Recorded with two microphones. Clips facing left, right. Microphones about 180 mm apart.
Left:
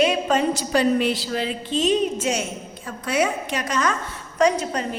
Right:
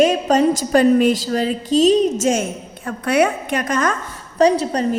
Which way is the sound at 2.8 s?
65° right (ahead or behind).